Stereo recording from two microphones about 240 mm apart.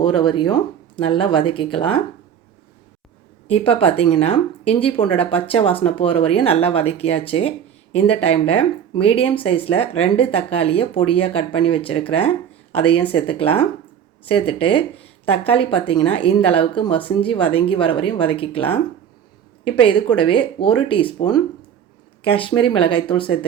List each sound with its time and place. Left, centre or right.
0.0 s speech: centre
3.5 s speech: left
19.8 s speech: left